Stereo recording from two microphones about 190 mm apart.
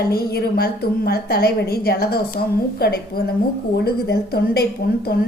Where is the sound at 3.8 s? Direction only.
55° left (ahead or behind).